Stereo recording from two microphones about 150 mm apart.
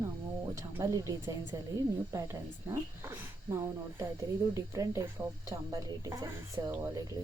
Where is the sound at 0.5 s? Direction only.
20° right (ahead or behind).